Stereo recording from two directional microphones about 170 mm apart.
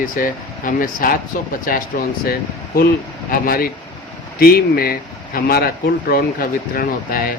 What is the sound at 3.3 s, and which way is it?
Speech, 60° left (ahead or behind).